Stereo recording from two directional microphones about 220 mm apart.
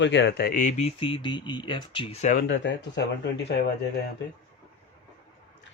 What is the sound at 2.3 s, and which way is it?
Speech, 45° left (ahead or behind).